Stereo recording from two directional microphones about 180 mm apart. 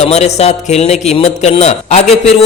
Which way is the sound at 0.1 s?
35° left (ahead or behind).